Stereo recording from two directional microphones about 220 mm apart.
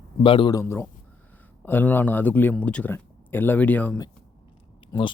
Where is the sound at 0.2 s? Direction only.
25° left (ahead or behind).